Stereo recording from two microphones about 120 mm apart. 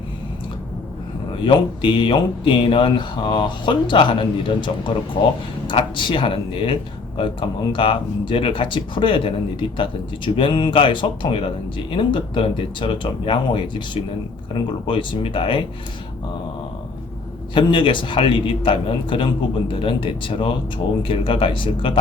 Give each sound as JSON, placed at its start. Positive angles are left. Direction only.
{"t": 1.5, "sound": "speech", "side_deg": 40}
{"t": 17.5, "sound": "speech", "side_deg": 45}